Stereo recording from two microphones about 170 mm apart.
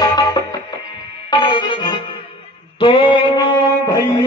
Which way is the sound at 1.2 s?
30° left (ahead or behind).